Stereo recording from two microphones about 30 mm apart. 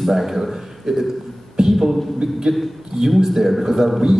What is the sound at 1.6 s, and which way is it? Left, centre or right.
Beatboxing, centre.